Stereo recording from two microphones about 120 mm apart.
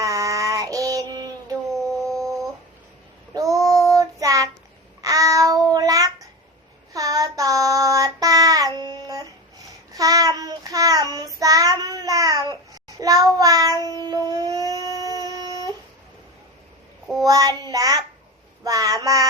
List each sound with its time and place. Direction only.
0.0 s child singing: 25° right (ahead or behind)
3.3 s child singing: 30° right (ahead or behind)
14.3 s a sound: 35° right (ahead or behind)
17.2 s child singing: 30° right (ahead or behind)